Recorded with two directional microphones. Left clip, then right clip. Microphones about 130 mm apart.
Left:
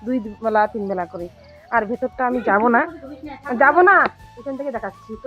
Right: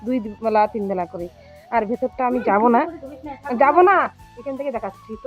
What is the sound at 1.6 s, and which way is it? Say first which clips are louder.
Speech: left 1 dB; 35° right (ahead or behind).